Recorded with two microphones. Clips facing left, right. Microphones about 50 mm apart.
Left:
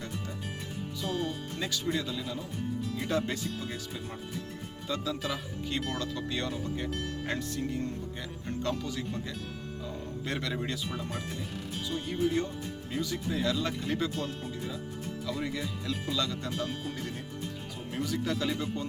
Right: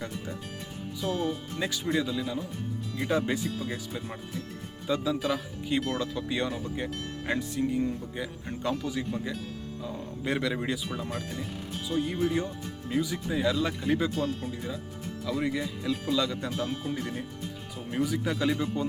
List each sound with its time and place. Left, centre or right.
1.0 s speech: centre